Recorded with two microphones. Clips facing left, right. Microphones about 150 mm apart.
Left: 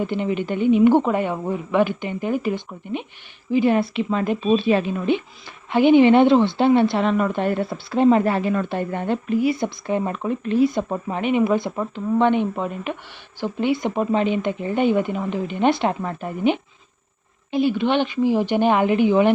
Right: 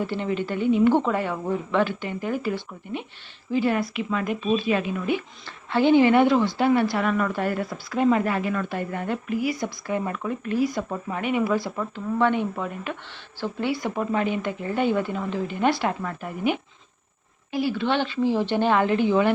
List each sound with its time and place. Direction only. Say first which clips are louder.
0.0 s a woman's voice: left 3 dB; 15° left (ahead or behind)
5.7 s a woman's voice: left 4 dB; 15° left (ahead or behind)